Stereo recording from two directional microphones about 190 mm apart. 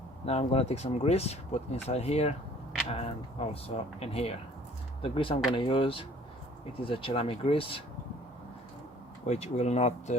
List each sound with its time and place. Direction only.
0.3 s speech: 35° left (ahead or behind)
9.2 s speech: 35° left (ahead or behind)